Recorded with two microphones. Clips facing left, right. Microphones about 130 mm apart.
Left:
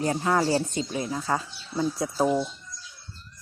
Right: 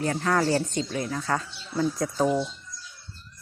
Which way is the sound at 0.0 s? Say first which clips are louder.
Even; 15° left (ahead or behind).